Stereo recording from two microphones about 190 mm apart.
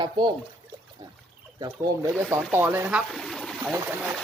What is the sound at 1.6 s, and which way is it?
Speech, 20° right (ahead or behind).